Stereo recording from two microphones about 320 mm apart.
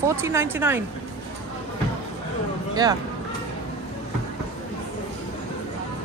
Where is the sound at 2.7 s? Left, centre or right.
Centre.